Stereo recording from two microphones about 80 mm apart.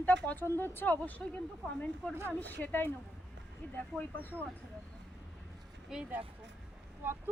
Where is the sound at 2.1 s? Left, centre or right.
Right.